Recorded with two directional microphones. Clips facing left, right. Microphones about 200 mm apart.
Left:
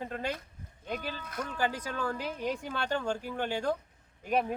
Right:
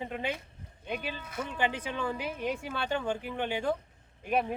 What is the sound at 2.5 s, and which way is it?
Speech, 5° right (ahead or behind).